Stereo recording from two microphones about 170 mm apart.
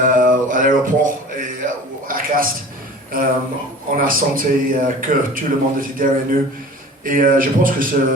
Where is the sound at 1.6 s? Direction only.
50° right (ahead or behind).